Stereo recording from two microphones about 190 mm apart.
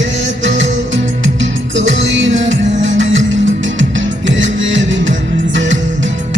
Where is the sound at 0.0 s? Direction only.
75° right (ahead or behind).